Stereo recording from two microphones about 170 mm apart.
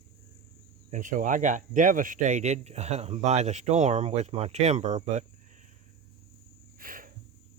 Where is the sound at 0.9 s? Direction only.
50° right (ahead or behind).